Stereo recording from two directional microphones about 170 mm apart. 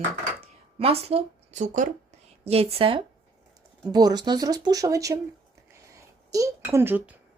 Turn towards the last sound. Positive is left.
turn(degrees=-10)  # may be behind; listen again after turning